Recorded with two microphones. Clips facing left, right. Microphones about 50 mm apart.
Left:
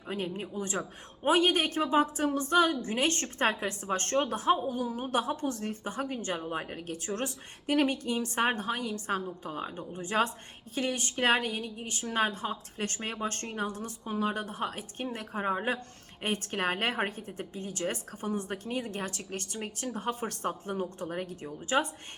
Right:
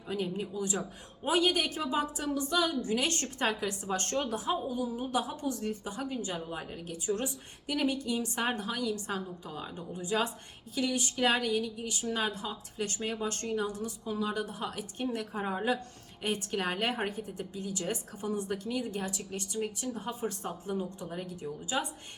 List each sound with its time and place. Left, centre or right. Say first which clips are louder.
0.1 s speech: right 1 dB; left
19.5 s speech: right 5 dB; left
19.9 s speech: left 2 dB; left